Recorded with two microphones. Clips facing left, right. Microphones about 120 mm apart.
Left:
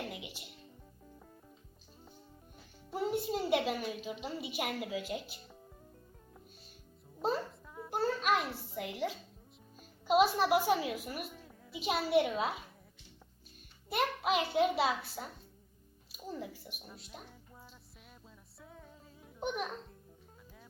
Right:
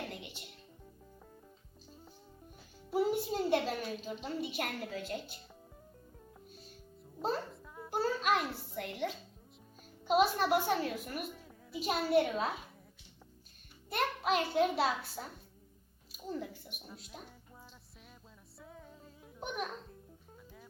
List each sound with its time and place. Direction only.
0.1 s music: 5° left (ahead or behind)
2.9 s a woman's voice: centre (ahead or behind)
7.2 s a sound: centre (ahead or behind)
10.1 s a woman's voice: 5° left (ahead or behind)
13.9 s a woman's voice: 5° left (ahead or behind)
18.6 s music: centre (ahead or behind)